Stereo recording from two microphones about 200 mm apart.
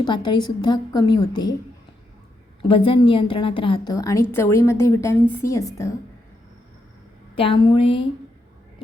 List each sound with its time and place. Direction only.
0.0 s a woman's voice: 20° left (ahead or behind)
2.6 s a woman's voice: 25° left (ahead or behind)
7.3 s a woman's voice: 25° left (ahead or behind)